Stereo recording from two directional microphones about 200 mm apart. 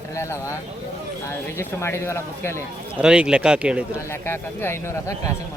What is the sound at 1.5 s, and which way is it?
Speech, 15° left (ahead or behind).